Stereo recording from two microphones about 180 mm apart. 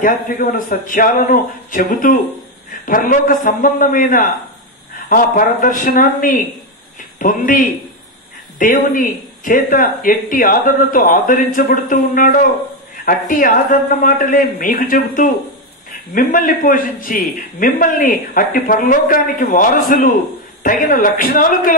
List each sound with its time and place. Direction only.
0.0 s a man's voice: 50° left (ahead or behind)